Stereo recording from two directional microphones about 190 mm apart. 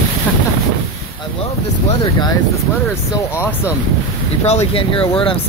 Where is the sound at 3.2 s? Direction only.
15° left (ahead or behind).